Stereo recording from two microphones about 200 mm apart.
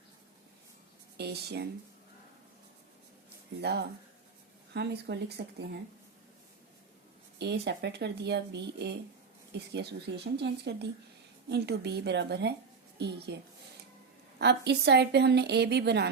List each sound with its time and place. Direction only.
1.1 s speech: 55° right (ahead or behind)
3.6 s a woman's voice: 55° right (ahead or behind)
7.3 s a woman's voice: 55° right (ahead or behind)